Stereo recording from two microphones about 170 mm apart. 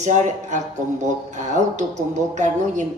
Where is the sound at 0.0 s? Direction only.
45° right (ahead or behind).